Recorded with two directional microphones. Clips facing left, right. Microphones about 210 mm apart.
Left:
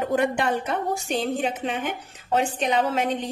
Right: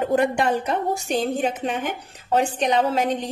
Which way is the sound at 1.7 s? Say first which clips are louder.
Right 2 dB; 40° right (ahead or behind).